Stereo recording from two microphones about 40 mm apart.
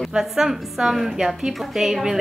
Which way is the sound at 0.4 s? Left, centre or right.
Centre.